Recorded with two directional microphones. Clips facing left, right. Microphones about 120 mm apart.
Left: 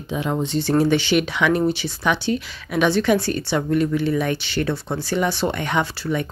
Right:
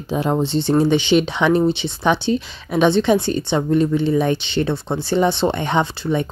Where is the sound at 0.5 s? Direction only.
25° right (ahead or behind).